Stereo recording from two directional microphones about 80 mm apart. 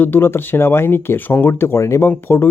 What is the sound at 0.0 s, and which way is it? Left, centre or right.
Speech, left.